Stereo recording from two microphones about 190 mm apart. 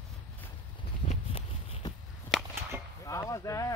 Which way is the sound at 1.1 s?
30° left (ahead or behind).